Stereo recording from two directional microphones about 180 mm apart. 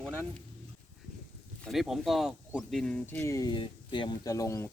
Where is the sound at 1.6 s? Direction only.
Centre (ahead or behind).